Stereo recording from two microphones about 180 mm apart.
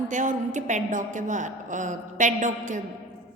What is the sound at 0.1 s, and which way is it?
A woman's voice, 45° right (ahead or behind).